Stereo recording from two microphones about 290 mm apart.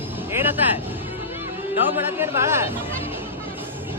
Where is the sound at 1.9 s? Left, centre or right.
Centre.